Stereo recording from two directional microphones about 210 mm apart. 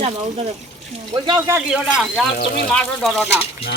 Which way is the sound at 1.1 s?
15° right (ahead or behind).